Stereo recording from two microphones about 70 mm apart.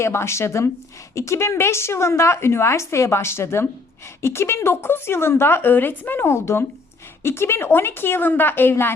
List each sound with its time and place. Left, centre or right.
0.0 s a woman's voice: left